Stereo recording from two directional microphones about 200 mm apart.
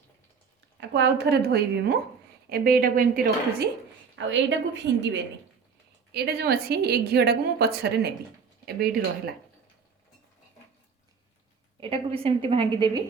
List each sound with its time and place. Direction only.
0.8 s a woman's voice: 60° right (ahead or behind)
4.1 s a woman's voice: 65° right (ahead or behind); by 9.3 s 50° right (ahead or behind)
11.8 s a woman's voice: 30° right (ahead or behind)